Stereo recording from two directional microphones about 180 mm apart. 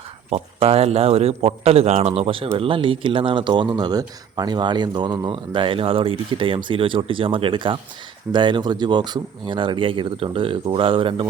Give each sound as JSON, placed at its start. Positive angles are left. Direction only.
{"t": 0.3, "sound": "speech", "side_deg": -35}